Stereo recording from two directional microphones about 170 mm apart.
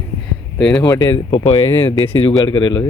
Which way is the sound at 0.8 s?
20° left (ahead or behind).